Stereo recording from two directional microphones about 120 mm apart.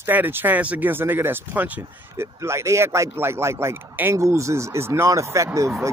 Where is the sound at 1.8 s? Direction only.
25° right (ahead or behind).